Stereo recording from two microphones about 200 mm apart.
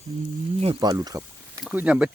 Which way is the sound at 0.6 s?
20° right (ahead or behind).